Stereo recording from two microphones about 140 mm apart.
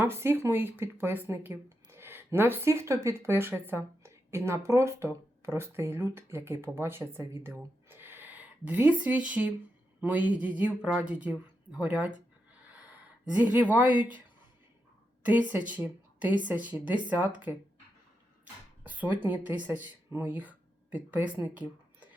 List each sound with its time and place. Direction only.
0.0 s speech: 15° right (ahead or behind)
13.3 s speech: 10° right (ahead or behind)
15.2 s a woman's voice: 10° right (ahead or behind)
18.8 s speech: 10° right (ahead or behind)